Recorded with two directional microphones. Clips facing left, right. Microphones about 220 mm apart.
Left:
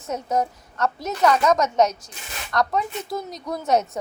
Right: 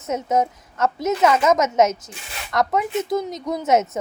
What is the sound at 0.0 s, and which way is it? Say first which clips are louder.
A woman's voice: right 3 dB; 20° right (ahead or behind).